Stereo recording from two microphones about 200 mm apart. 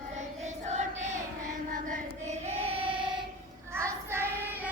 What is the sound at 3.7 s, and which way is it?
Child singing, 15° right (ahead or behind).